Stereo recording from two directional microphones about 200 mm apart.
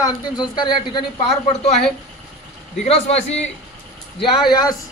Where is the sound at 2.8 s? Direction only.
30° left (ahead or behind).